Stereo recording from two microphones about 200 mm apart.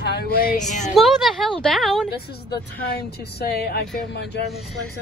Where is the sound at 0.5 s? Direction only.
40° left (ahead or behind).